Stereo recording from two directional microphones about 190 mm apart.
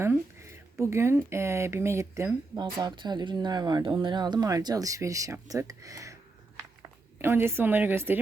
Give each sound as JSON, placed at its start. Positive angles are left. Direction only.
{"t": 0.0, "sound": "speech", "side_deg": -15}
{"t": 7.2, "sound": "speech", "side_deg": -10}